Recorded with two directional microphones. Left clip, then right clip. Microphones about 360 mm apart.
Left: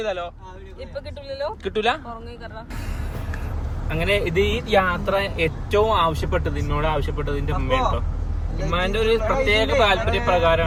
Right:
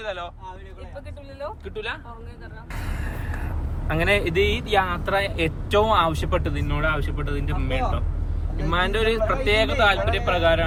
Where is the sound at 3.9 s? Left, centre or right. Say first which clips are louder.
Even; centre.